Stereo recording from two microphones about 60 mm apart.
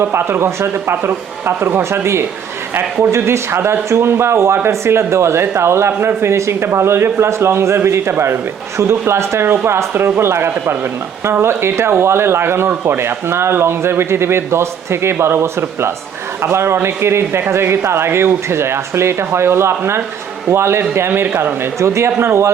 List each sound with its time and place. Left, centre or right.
0.0 s speech: right